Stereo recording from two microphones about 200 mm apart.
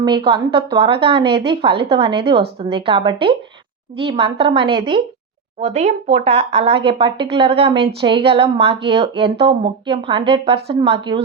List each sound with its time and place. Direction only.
0.0 s speech: 25° right (ahead or behind)